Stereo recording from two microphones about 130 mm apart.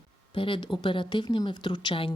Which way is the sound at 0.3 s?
40° left (ahead or behind).